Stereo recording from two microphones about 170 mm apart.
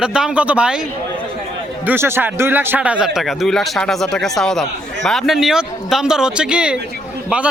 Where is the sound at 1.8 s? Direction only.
10° right (ahead or behind).